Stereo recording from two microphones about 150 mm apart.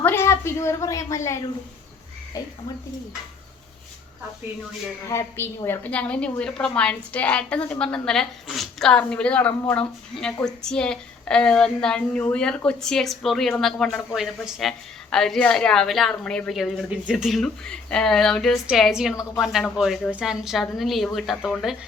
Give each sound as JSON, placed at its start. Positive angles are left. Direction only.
{"t": 0.0, "sound": "a woman's voice", "side_deg": 15}
{"t": 5.0, "sound": "a woman's voice", "side_deg": 15}